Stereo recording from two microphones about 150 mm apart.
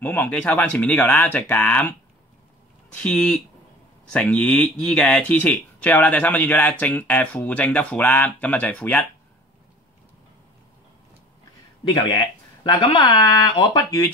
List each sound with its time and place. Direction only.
0.0 s speech: 10° left (ahead or behind)
3.0 s speech: 5° left (ahead or behind)
12.1 s speech: 30° left (ahead or behind)